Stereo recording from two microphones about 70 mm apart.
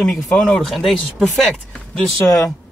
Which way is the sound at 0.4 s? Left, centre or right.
Centre.